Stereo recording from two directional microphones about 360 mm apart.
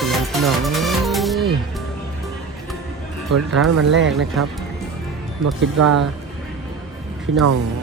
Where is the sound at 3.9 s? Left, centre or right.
Right.